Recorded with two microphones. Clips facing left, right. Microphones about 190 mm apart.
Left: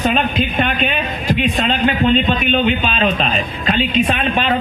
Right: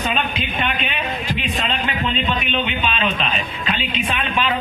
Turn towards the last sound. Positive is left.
turn(degrees=40)  # may be behind; listen again after turning